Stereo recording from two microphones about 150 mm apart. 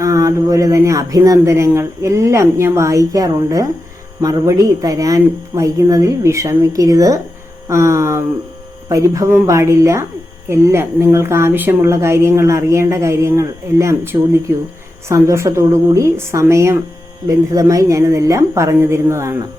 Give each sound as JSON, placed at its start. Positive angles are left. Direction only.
{"t": 0.0, "sound": "a woman's voice", "side_deg": -20}